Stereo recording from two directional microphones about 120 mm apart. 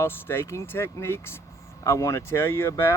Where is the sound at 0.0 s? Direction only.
20° left (ahead or behind).